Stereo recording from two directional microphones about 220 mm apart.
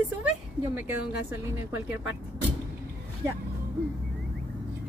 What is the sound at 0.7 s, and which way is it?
Speech, 10° right (ahead or behind).